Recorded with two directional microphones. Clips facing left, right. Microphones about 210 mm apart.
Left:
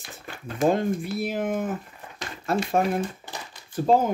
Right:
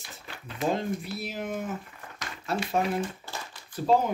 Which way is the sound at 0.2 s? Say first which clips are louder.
Left 7 dB; 50° left (ahead or behind).